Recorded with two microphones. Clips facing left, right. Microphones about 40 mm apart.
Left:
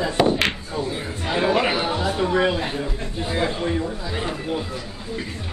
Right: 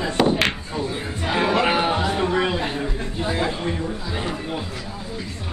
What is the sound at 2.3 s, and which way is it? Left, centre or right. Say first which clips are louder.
Speech: left 1 dB; centre.